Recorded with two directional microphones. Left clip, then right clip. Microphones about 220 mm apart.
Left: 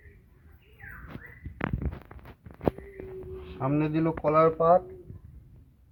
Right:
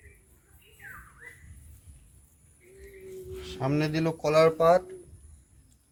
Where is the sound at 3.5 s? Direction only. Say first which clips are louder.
Left 1 dB; 20° right (ahead or behind).